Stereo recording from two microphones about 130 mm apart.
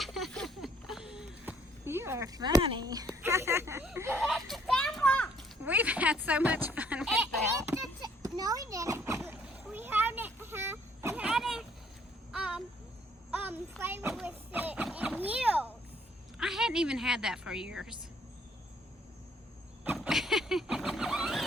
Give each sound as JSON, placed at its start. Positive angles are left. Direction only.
{"t": 0.0, "sound": "a sound", "side_deg": 0}
{"t": 1.8, "sound": "a sound", "side_deg": -20}
{"t": 2.6, "sound": "speech", "side_deg": -45}
{"t": 2.8, "sound": "speech", "side_deg": -30}
{"t": 3.1, "sound": "speech", "side_deg": -20}
{"t": 4.2, "sound": "children playing", "side_deg": 0}
{"t": 5.6, "sound": "speech", "side_deg": -10}
{"t": 7.7, "sound": "a sound", "side_deg": -25}
{"t": 13.4, "sound": "a child's voice", "side_deg": -15}
{"t": 14.3, "sound": "music", "side_deg": -10}
{"t": 14.8, "sound": "vehicle", "side_deg": -10}
{"t": 16.4, "sound": "a woman's voice", "side_deg": -5}
{"t": 20.0, "sound": "a sound", "side_deg": 0}